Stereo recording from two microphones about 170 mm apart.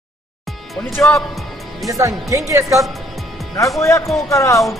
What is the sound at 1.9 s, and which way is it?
Speech, 20° right (ahead or behind).